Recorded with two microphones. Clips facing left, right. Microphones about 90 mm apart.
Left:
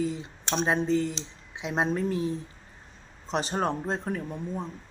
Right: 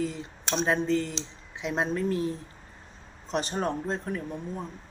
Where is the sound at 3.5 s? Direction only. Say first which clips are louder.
Left 1 dB; 30° left (ahead or behind).